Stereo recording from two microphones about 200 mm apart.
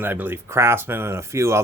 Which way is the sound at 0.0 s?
10° right (ahead or behind).